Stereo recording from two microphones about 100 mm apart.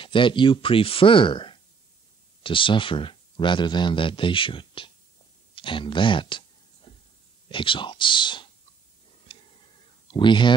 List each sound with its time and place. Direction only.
0.0 s speech: 55° left (ahead or behind)
5.5 s a sound: 60° left (ahead or behind)
7.4 s speech: 55° left (ahead or behind)
9.2 s clicking: 60° left (ahead or behind)